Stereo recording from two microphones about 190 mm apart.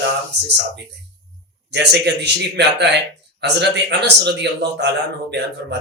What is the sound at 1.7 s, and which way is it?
Speech, 65° right (ahead or behind).